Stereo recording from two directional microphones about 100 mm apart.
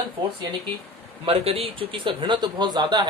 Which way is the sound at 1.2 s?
70° right (ahead or behind).